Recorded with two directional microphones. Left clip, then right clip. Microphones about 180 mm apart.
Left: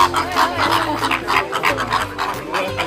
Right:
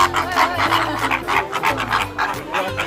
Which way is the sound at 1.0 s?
15° right (ahead or behind).